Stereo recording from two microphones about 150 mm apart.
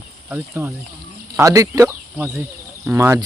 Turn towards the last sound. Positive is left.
turn(degrees=-15)  # may be behind; listen again after turning